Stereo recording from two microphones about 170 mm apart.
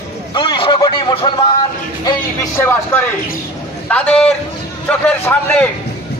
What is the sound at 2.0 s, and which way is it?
A man's voice, 15° left (ahead or behind).